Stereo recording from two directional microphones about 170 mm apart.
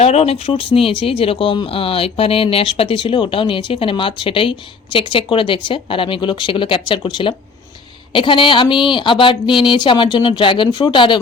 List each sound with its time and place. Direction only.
0.0 s speech: 35° left (ahead or behind)